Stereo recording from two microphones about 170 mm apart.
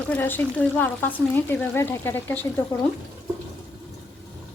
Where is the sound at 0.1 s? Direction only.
10° left (ahead or behind).